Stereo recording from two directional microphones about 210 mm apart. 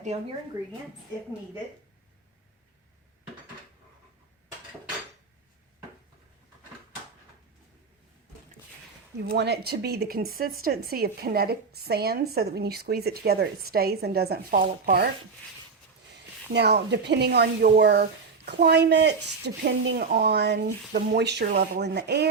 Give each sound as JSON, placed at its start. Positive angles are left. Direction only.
{"t": 9.3, "sound": "speech", "side_deg": -50}
{"t": 16.5, "sound": "speech", "side_deg": -50}